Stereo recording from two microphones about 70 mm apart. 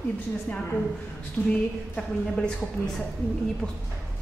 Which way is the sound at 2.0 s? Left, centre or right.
Centre.